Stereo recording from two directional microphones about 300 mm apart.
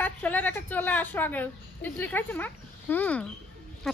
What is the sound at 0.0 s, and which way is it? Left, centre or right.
Speech, centre.